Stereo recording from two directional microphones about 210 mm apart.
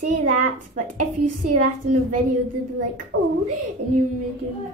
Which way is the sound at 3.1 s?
65° right (ahead or behind).